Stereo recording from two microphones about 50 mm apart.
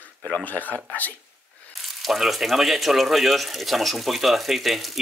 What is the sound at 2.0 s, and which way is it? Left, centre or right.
Speech, centre.